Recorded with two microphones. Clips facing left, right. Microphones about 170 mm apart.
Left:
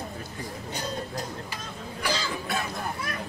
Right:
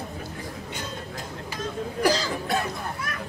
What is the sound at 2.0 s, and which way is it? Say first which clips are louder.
Cough: right 6 dB; 40° right (ahead or behind).